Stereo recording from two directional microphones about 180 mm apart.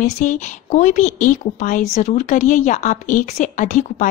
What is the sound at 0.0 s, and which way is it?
Speech, 45° left (ahead or behind).